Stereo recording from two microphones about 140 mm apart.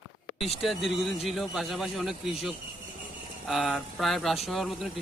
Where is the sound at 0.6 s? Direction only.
Centre (ahead or behind).